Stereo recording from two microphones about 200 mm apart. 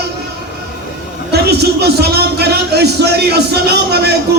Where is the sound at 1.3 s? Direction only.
55° right (ahead or behind).